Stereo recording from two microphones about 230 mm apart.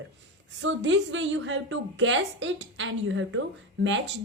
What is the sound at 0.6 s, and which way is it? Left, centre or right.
A woman's voice, right.